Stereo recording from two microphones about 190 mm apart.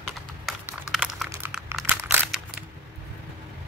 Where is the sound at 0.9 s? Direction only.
5° right (ahead or behind).